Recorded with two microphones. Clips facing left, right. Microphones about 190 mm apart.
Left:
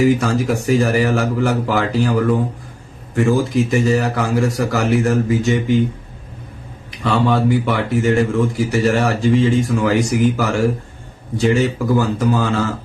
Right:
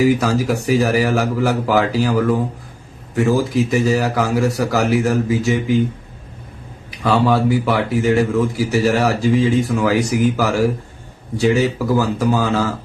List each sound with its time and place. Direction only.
0.2 s speech: 5° right (ahead or behind)
7.0 s speech: 5° right (ahead or behind)